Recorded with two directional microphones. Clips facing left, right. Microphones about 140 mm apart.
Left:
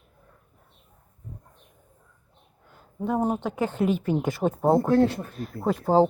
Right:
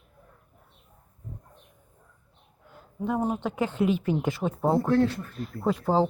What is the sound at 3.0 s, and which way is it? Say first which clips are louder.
Speech: left 2 dB; 40° left (ahead or behind).